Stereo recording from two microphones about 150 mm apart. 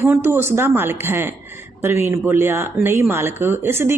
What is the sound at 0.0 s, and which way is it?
Speech, 15° right (ahead or behind).